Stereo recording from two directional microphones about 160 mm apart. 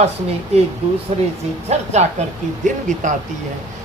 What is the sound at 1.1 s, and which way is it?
Speech, 40° right (ahead or behind).